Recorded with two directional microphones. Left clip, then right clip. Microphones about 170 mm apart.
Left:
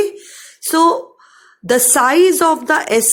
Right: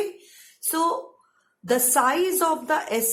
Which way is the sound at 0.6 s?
40° left (ahead or behind).